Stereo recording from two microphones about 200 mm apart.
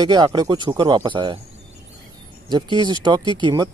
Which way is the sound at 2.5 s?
20° right (ahead or behind).